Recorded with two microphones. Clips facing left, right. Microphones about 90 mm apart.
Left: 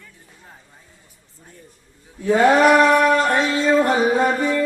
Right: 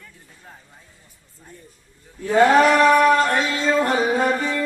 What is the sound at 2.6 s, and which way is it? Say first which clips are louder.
Music: left 1 dB; 15° left (ahead or behind).